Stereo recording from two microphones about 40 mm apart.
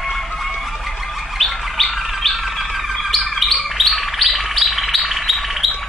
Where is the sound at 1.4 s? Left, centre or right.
Centre.